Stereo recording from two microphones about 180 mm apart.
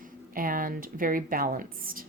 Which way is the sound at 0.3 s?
50° right (ahead or behind).